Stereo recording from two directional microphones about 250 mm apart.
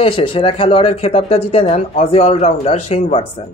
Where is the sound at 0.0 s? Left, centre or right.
Left.